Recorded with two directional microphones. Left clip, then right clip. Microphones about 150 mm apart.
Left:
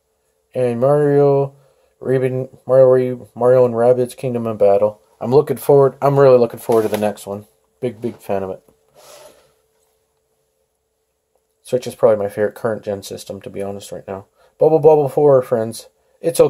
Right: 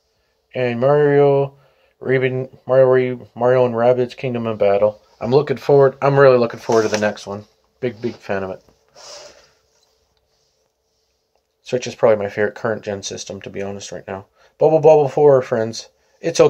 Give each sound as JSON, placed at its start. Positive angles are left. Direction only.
{"t": 0.5, "sound": "speech", "side_deg": 10}
{"t": 11.6, "sound": "speech", "side_deg": 5}